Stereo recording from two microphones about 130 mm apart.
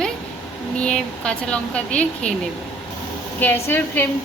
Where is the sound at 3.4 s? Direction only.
15° left (ahead or behind).